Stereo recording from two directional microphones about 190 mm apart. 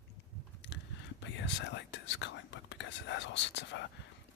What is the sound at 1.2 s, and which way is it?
Whispering, 70° left (ahead or behind).